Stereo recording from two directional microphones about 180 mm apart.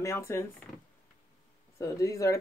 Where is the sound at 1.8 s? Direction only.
15° left (ahead or behind).